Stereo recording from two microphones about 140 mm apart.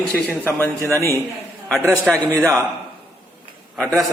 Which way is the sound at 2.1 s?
5° left (ahead or behind).